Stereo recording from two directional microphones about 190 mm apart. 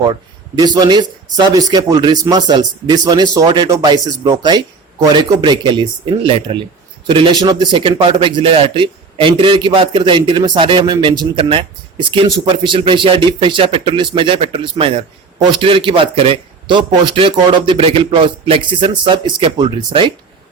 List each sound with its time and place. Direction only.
0.0 s a man's voice: 20° right (ahead or behind)